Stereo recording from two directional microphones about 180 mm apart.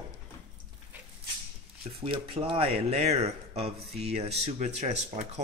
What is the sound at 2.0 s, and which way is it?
Speech, 30° right (ahead or behind).